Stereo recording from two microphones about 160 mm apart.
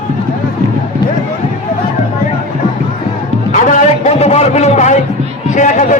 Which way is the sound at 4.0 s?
45° left (ahead or behind).